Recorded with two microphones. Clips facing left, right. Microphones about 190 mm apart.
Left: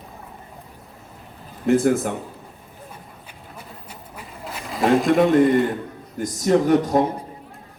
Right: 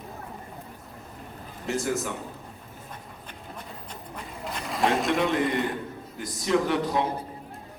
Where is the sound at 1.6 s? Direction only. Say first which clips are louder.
Left 10 dB; 55° left (ahead or behind).